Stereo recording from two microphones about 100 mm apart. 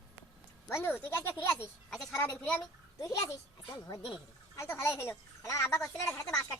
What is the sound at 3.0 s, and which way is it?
Speech, 35° left (ahead or behind).